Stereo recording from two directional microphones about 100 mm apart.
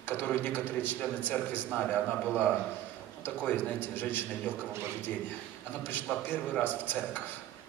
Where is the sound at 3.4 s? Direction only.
20° left (ahead or behind).